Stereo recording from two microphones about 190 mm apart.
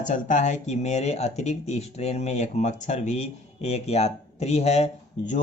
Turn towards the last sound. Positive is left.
turn(degrees=35)  # may be behind; listen again after turning